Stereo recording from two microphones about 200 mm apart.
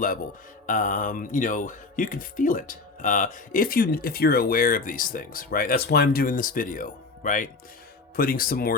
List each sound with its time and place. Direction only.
0.7 s speech: 40° left (ahead or behind)